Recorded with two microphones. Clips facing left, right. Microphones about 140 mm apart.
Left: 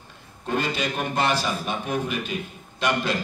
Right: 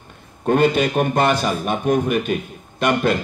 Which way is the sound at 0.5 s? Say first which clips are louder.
Right 10 dB; 55° right (ahead or behind).